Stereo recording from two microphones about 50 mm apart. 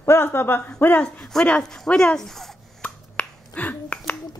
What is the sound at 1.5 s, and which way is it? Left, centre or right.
Speech, left.